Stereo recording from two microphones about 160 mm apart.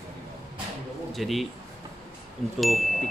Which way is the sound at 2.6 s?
Centre (ahead or behind).